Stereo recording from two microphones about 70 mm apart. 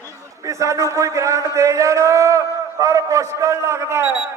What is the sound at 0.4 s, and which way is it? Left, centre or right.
A man's voice, right.